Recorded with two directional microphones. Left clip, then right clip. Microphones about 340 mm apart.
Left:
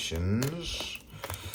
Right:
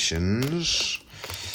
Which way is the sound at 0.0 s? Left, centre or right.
Centre.